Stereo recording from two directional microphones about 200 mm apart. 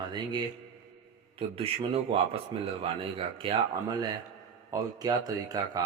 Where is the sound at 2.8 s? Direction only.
25° right (ahead or behind).